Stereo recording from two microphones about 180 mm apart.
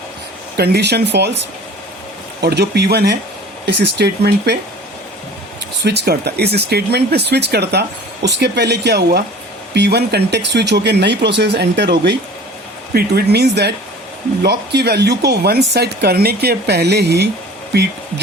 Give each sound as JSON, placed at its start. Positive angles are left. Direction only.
{"t": 0.5, "sound": "speech", "side_deg": -60}
{"t": 2.4, "sound": "speech", "side_deg": -65}
{"t": 5.8, "sound": "speech", "side_deg": -70}